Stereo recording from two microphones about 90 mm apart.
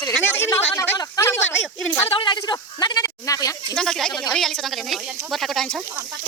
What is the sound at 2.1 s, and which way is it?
Speech, 60° left (ahead or behind).